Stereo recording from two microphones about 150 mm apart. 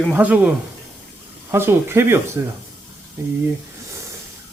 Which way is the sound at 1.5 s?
15° right (ahead or behind).